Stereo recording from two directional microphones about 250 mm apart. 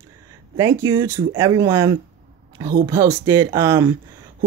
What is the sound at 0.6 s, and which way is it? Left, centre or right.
Speech, centre.